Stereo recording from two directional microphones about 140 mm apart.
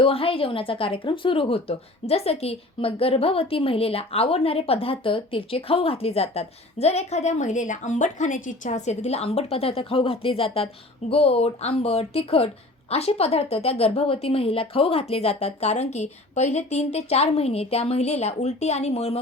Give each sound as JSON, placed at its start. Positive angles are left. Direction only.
{"t": 0.0, "sound": "a woman's voice", "side_deg": 40}